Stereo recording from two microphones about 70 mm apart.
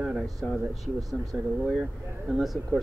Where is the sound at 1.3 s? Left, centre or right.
Centre.